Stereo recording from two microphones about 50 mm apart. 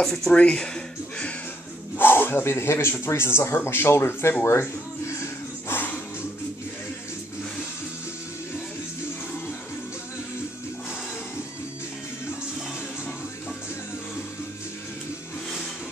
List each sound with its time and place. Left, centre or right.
0.0 s speech: centre
0.3 s speech: centre
2.0 s speech: left